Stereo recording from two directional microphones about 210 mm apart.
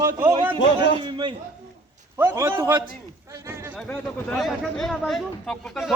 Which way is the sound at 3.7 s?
5° left (ahead or behind).